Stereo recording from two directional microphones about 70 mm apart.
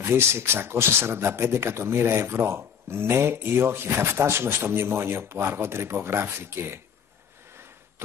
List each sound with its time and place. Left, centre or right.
0.0 s speech: right